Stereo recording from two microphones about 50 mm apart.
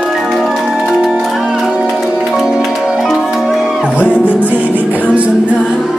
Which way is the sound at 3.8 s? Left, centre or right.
Right.